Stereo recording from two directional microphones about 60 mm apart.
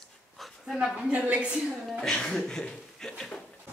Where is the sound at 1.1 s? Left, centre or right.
Centre.